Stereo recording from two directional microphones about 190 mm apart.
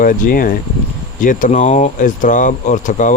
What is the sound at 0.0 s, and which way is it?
Speech, 45° left (ahead or behind).